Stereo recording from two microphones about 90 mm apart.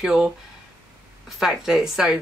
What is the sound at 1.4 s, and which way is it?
Speech, 5° right (ahead or behind).